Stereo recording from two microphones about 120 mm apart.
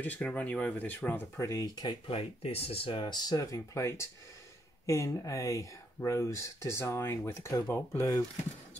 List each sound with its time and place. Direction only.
0.0 s speech: 15° left (ahead or behind)
1.4 s speech: 30° left (ahead or behind)
2.0 s speech: 55° left (ahead or behind)
3.1 s speech: 35° left (ahead or behind)